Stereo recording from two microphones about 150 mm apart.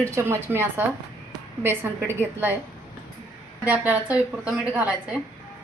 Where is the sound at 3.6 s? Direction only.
10° right (ahead or behind).